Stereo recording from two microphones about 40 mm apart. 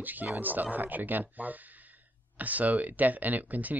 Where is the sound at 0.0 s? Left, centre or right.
Right.